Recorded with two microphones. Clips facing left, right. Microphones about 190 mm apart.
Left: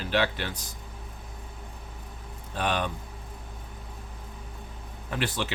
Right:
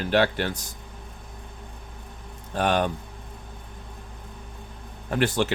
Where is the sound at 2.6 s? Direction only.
50° right (ahead or behind).